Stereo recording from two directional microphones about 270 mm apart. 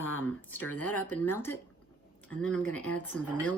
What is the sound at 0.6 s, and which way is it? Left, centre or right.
Speech, left.